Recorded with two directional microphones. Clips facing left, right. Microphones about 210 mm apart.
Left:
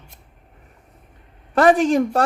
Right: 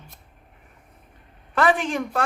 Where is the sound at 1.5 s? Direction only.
40° left (ahead or behind).